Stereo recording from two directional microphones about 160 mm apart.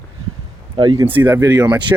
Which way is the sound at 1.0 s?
10° right (ahead or behind).